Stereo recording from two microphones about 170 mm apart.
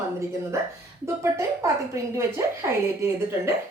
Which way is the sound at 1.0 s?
20° right (ahead or behind).